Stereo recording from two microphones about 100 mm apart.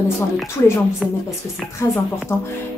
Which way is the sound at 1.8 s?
30° left (ahead or behind).